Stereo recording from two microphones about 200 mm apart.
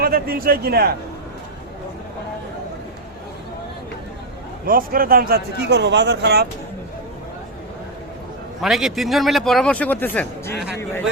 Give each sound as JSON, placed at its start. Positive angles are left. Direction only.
{"t": 0.0, "sound": "a man's voice", "side_deg": -50}
{"t": 4.6, "sound": "a man's voice", "side_deg": -45}
{"t": 8.6, "sound": "a man's voice", "side_deg": 0}